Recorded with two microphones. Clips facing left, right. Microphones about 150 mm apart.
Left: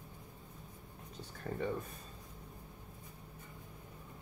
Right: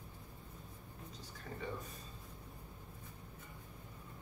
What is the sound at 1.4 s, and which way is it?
Speech, 45° left (ahead or behind).